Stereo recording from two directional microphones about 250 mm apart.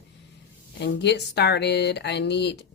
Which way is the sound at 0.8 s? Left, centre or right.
Left.